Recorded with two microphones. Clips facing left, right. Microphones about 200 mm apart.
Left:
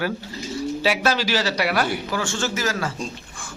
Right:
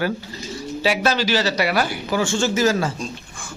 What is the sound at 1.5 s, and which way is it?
Speech, centre (ahead or behind).